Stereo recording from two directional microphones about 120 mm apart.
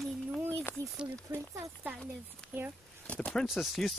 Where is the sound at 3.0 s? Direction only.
10° left (ahead or behind).